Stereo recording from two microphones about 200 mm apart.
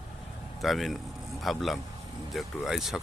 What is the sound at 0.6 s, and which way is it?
A man's voice, centre (ahead or behind).